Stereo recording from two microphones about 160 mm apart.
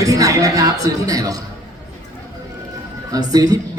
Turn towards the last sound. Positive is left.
turn(degrees=-25)  # may be behind; listen again after turning